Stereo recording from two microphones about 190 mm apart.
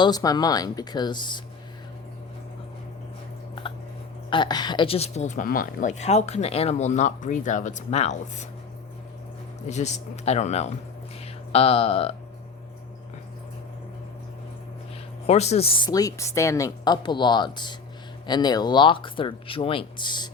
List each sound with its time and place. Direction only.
0.0 s a woman's voice: 20° left (ahead or behind)
4.3 s speech: 25° left (ahead or behind)
9.6 s speech: 35° left (ahead or behind)
15.3 s a woman's voice: 35° left (ahead or behind)